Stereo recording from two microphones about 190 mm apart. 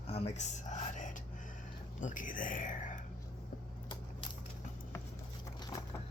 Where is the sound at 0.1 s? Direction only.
30° left (ahead or behind).